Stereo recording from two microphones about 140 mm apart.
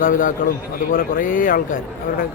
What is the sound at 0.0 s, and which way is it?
A man's voice, 75° left (ahead or behind).